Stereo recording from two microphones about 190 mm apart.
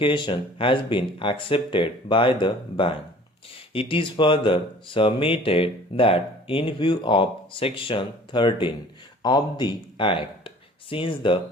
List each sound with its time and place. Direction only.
0.0 s speech: 25° left (ahead or behind)